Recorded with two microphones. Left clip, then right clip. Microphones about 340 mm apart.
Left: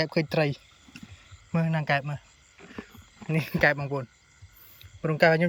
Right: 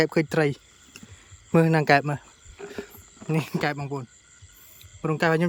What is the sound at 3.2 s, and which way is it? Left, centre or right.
Speech, centre.